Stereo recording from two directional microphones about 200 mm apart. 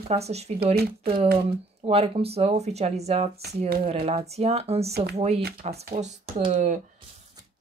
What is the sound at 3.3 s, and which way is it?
Speech, 50° right (ahead or behind).